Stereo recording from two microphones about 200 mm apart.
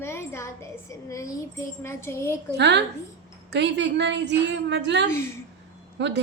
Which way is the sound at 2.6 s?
60° right (ahead or behind).